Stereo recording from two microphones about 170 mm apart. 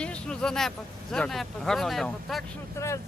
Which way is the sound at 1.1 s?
5° left (ahead or behind).